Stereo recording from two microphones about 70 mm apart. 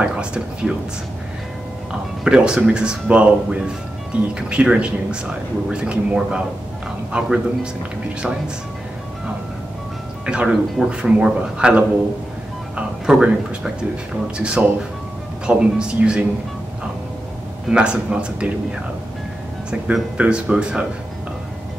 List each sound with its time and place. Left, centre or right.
0.0 s speech: centre
1.9 s speech: centre
10.2 s speech: centre
17.6 s speech: centre
19.7 s speech: centre